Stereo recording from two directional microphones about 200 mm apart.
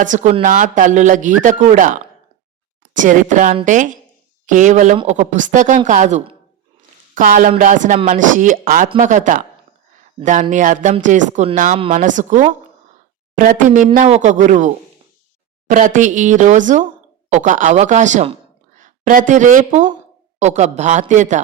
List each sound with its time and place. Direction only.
0.0 s speech: 40° right (ahead or behind)
15.7 s speech: 40° right (ahead or behind)